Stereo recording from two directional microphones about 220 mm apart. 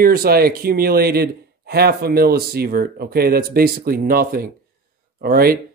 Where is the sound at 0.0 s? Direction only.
45° right (ahead or behind).